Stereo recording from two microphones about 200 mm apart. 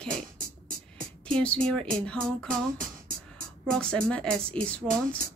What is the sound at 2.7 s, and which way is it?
Music, 45° right (ahead or behind).